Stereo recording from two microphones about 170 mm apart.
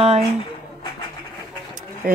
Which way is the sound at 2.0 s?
60° right (ahead or behind).